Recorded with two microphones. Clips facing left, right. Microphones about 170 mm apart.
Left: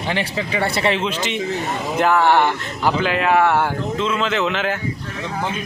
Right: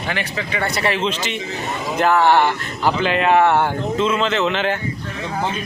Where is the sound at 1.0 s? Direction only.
10° left (ahead or behind).